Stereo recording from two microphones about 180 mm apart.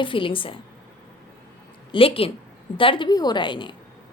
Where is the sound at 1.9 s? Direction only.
30° left (ahead or behind).